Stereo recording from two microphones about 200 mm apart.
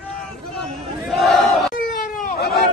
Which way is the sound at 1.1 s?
Centre (ahead or behind).